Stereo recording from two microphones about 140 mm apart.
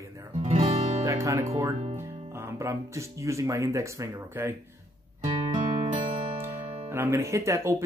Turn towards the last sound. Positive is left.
turn(degrees=-20)  # may be behind; listen again after turning